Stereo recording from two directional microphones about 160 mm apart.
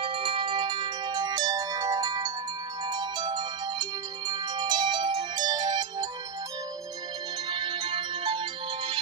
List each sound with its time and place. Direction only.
0.0 s music: 35° right (ahead or behind)
7.5 s music: 30° right (ahead or behind)